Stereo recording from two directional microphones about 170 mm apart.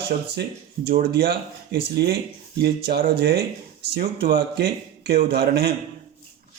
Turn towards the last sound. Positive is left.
turn(degrees=-70)  # may be behind; listen again after turning